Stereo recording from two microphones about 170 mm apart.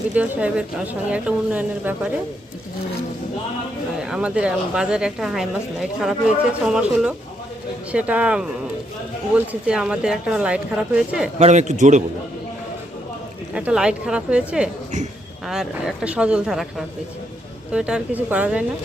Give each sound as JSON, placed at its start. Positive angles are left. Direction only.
{"t": 0.1, "sound": "a woman's voice", "side_deg": -5}
{"t": 3.9, "sound": "a woman's voice", "side_deg": -5}
{"t": 11.3, "sound": "a man's voice", "side_deg": -40}
{"t": 13.5, "sound": "a woman's voice", "side_deg": -5}